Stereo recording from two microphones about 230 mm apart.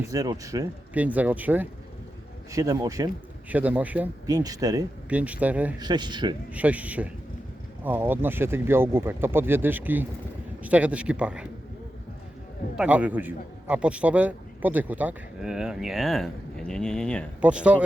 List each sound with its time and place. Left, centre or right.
0.0 s speech: centre
5.8 s speech: centre
6.5 s a man's voice: centre
12.7 s a man's voice: centre